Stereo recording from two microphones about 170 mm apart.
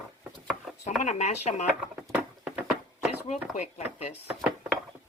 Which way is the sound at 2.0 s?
5° right (ahead or behind).